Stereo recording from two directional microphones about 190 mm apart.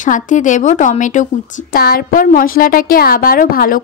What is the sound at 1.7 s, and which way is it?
A woman's voice, 50° left (ahead or behind).